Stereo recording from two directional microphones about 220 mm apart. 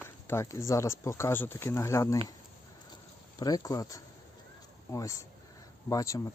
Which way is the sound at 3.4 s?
15° left (ahead or behind).